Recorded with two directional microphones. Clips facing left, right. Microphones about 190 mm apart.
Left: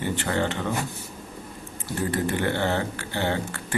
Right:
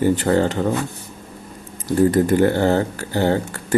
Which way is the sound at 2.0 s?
40° right (ahead or behind).